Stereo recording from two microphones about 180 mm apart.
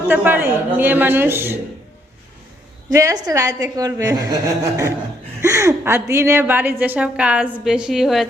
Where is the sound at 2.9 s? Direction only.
20° right (ahead or behind).